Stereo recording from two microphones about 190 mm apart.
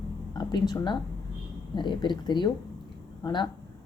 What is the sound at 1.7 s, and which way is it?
A woman's voice, 25° left (ahead or behind).